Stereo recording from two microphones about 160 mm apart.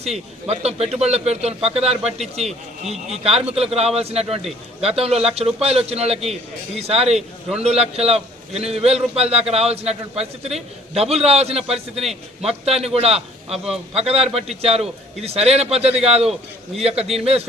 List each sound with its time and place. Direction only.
0.0 s a man's voice: 40° right (ahead or behind)